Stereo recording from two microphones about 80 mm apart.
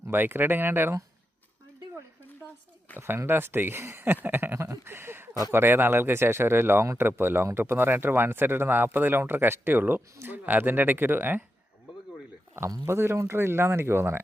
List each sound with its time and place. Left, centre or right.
0.1 s speech: right
2.4 s a sound: left
3.0 s speech: right
12.5 s speech: right